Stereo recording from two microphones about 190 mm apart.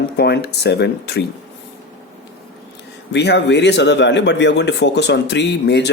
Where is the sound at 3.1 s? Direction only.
65° left (ahead or behind).